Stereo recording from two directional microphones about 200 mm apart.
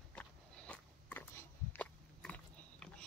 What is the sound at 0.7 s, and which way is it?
Biting, 10° left (ahead or behind).